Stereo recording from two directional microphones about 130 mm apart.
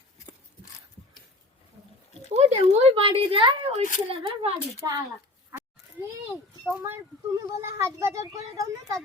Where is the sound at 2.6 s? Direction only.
45° right (ahead or behind).